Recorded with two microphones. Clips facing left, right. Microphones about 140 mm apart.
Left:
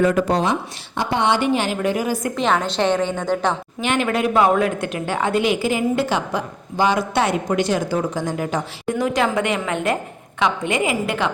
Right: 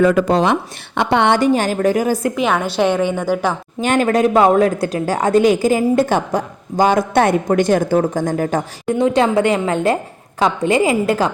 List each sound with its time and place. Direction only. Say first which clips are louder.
0.9 s a woman's voice: right 5 dB; 65° right (ahead or behind)
1.4 s speech: right 5 dB; 40° right (ahead or behind)
2.3 s a woman's voice: right 2 dB; 5° right (ahead or behind)
3.8 s speech: right 8 dB; 40° right (ahead or behind)
9.0 s a woman's voice: right 6 dB; 30° right (ahead or behind)